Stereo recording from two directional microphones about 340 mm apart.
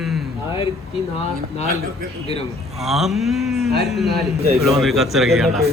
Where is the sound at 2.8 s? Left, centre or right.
Centre.